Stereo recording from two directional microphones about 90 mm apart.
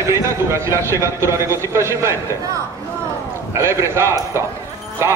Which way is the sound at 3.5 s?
30° right (ahead or behind).